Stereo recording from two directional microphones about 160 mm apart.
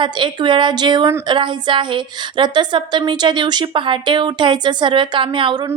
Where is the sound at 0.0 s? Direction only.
30° right (ahead or behind).